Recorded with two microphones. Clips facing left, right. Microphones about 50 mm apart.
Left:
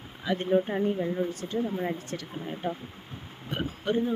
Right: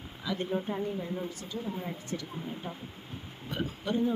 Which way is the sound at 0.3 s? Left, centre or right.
Left.